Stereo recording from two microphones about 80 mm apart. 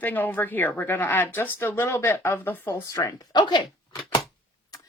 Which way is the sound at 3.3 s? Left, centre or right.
Left.